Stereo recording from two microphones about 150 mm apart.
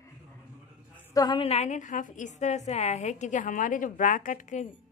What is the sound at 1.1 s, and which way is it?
A woman's voice, 30° left (ahead or behind).